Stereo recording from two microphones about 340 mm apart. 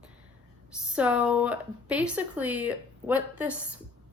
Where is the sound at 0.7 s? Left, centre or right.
Centre.